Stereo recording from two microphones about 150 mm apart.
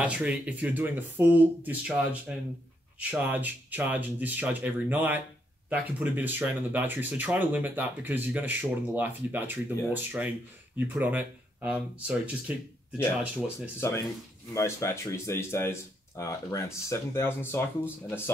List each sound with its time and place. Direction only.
0.0 s speech: 10° right (ahead or behind)
13.7 s speech: 15° left (ahead or behind)